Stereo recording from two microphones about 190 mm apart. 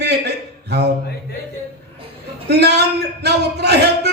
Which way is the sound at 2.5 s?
60° right (ahead or behind).